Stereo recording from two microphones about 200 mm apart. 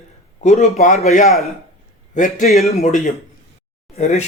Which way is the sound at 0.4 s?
35° left (ahead or behind).